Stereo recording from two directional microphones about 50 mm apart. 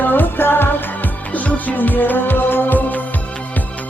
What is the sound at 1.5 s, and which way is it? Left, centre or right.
Music, left.